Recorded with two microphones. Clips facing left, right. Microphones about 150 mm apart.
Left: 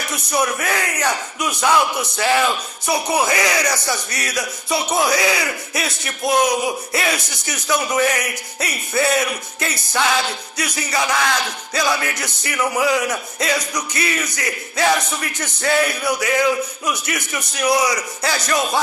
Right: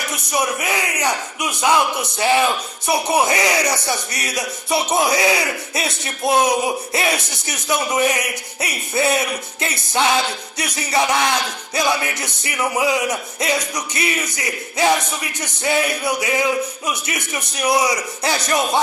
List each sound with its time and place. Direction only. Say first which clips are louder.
0.3 s speech: left 1 dB; 15° right (ahead or behind)